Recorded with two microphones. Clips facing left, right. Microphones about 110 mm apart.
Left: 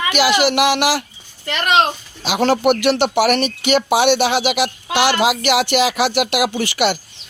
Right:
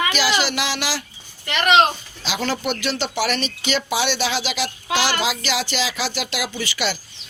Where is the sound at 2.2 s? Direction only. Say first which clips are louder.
Left 9 dB; 60° left (ahead or behind).